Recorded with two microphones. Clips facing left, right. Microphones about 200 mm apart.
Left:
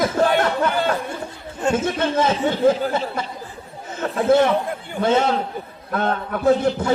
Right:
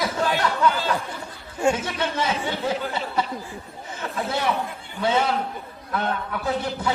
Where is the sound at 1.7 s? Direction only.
50° left (ahead or behind).